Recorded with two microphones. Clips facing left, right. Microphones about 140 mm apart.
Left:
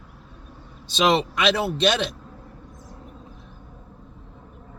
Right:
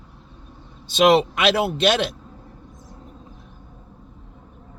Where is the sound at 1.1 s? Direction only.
55° right (ahead or behind).